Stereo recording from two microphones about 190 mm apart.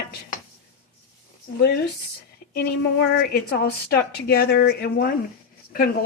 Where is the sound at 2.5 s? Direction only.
60° left (ahead or behind).